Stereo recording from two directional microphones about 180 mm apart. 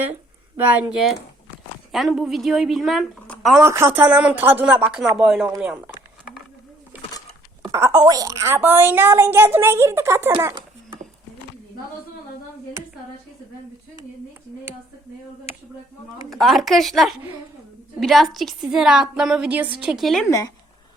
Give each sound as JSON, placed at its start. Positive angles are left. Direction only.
{"t": 0.5, "sound": "a woman's voice", "side_deg": -10}
{"t": 3.6, "sound": "a woman's voice", "side_deg": -15}
{"t": 7.7, "sound": "a woman's voice", "side_deg": -15}
{"t": 10.4, "sound": "a sound", "side_deg": -25}
{"t": 16.3, "sound": "a woman's voice", "side_deg": 0}